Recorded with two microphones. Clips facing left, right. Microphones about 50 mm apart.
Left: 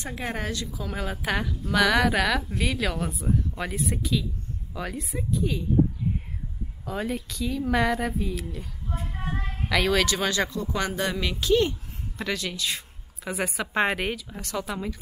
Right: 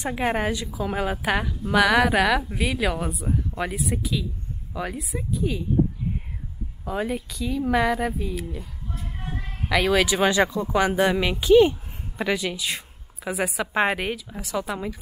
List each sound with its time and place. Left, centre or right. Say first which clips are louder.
0.0 s speech: right 7 dB; centre
6.8 s speech: right 3 dB; centre
9.7 s speech: right 3 dB; centre